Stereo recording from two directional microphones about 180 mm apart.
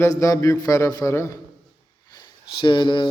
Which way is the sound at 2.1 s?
25° left (ahead or behind).